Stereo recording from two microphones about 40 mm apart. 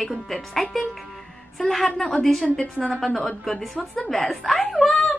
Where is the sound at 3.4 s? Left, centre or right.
Centre.